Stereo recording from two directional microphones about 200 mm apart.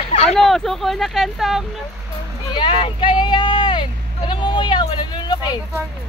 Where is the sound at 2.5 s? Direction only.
25° left (ahead or behind).